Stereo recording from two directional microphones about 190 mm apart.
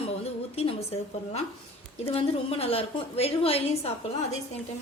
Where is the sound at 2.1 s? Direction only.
30° left (ahead or behind).